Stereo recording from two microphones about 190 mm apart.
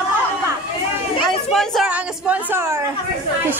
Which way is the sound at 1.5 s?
Centre (ahead or behind).